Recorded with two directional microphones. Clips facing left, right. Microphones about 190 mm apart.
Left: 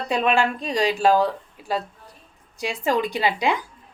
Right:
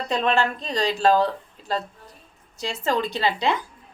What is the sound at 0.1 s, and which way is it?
A woman's voice, 10° left (ahead or behind).